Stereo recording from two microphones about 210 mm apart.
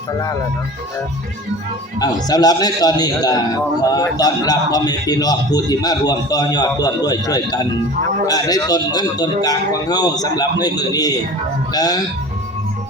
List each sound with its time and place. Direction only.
2.0 s a man's voice: 20° left (ahead or behind)